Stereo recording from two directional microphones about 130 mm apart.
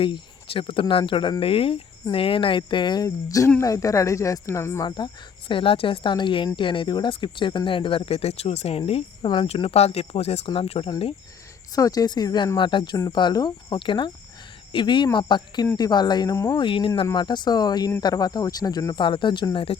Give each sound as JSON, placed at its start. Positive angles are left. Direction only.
{"t": 0.0, "sound": "speech", "side_deg": 40}
{"t": 4.9, "sound": "speech", "side_deg": 35}
{"t": 9.2, "sound": "speech", "side_deg": 40}
{"t": 11.7, "sound": "speech", "side_deg": 30}
{"t": 16.6, "sound": "speech", "side_deg": 40}